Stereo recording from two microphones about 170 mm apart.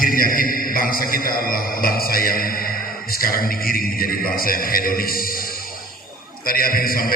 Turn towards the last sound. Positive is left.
turn(degrees=60)  # may be behind; listen again after turning